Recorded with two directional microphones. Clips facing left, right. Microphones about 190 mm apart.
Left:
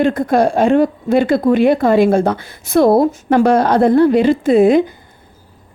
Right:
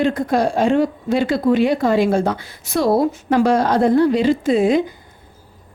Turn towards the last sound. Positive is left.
turn(degrees=55)  # may be behind; listen again after turning